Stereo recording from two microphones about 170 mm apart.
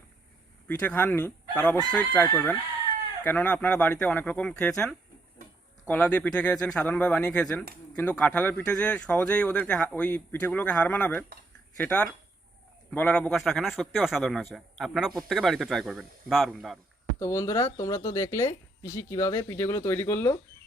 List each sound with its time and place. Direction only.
0.7 s speech: 10° left (ahead or behind)
17.2 s speech: 20° left (ahead or behind)